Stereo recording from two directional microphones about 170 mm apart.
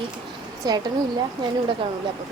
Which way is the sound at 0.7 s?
25° right (ahead or behind).